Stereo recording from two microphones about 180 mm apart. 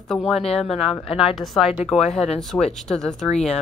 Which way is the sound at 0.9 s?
30° left (ahead or behind).